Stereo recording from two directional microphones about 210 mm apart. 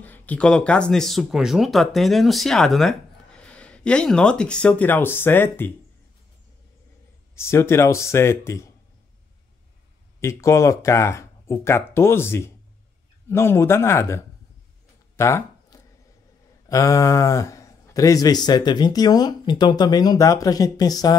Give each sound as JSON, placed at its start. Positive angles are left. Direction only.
{"t": 0.0, "sound": "speech", "side_deg": 10}
{"t": 7.3, "sound": "a man's voice", "side_deg": 10}
{"t": 10.2, "sound": "a man's voice", "side_deg": 15}
{"t": 15.1, "sound": "a sound", "side_deg": 15}
{"t": 16.6, "sound": "a man's voice", "side_deg": 15}